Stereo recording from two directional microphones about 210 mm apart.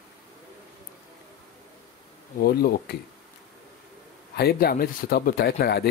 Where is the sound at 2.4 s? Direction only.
45° left (ahead or behind).